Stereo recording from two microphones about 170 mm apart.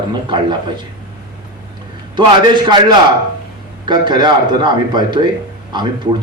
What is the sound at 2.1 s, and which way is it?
A man's voice, 25° right (ahead or behind).